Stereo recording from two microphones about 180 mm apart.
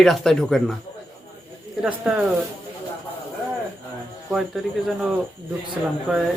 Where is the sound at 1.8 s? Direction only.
5° right (ahead or behind).